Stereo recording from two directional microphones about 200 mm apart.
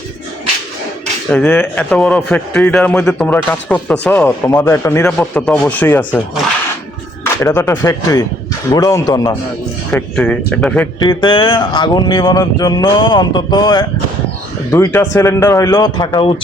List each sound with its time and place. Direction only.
1.3 s a man's voice: 10° left (ahead or behind)
7.4 s a man's voice: 10° left (ahead or behind)
8.7 s music: 15° left (ahead or behind)
9.9 s speech: 5° left (ahead or behind)
11.0 s music: 20° left (ahead or behind)
14.7 s a man's voice: 15° left (ahead or behind)